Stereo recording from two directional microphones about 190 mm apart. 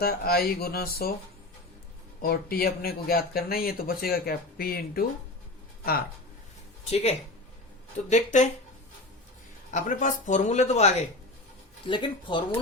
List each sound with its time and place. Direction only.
0.0 s speech: 55° left (ahead or behind)
2.2 s speech: 55° left (ahead or behind)
6.9 s speech: 35° left (ahead or behind)
9.7 s speech: 45° left (ahead or behind)
11.9 s speech: 25° left (ahead or behind)